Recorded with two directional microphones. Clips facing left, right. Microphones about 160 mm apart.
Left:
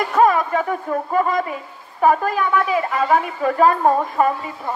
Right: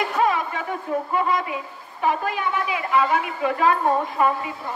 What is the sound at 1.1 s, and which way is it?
A man's voice, 45° left (ahead or behind).